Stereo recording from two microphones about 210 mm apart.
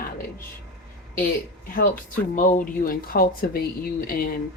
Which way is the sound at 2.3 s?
40° left (ahead or behind).